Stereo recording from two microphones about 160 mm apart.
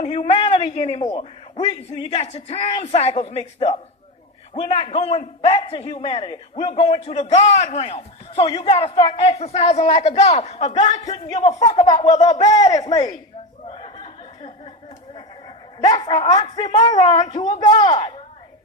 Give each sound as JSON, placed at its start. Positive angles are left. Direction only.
{"t": 0.0, "sound": "a sound", "side_deg": 45}
{"t": 0.3, "sound": "a man's voice", "side_deg": 30}
{"t": 8.4, "sound": "a man's voice", "side_deg": 30}
{"t": 11.7, "sound": "a man's voice", "side_deg": 30}
{"t": 13.7, "sound": "a sound", "side_deg": 35}
{"t": 15.9, "sound": "a woman's voice", "side_deg": 30}
{"t": 16.4, "sound": "a man's voice", "side_deg": 45}
{"t": 16.8, "sound": "a woman's voice", "side_deg": 25}